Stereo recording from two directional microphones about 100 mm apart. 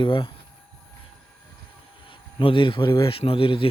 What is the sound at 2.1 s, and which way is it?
Speech, 60° left (ahead or behind).